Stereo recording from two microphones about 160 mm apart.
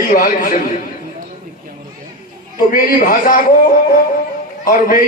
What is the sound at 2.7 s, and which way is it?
Speech, 60° left (ahead or behind).